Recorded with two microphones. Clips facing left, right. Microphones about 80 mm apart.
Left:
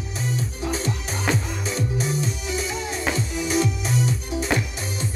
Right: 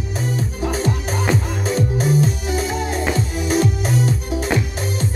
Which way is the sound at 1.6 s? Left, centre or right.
Right.